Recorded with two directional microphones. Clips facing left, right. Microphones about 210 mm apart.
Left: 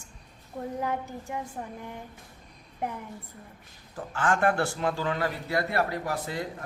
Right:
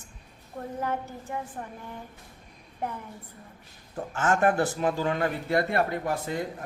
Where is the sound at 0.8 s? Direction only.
10° left (ahead or behind).